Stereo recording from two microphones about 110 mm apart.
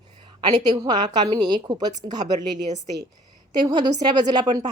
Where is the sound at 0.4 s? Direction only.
40° right (ahead or behind).